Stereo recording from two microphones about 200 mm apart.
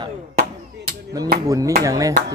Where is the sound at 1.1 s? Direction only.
15° right (ahead or behind).